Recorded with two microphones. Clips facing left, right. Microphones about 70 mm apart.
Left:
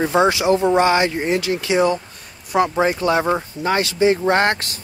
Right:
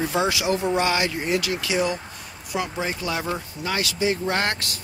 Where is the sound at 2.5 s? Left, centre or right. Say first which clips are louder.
Left 10 dB; left.